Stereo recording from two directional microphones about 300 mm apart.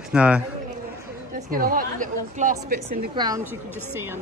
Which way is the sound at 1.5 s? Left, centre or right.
Right.